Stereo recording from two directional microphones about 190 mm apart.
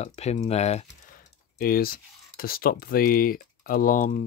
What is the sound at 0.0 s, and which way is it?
Speech, 35° left (ahead or behind).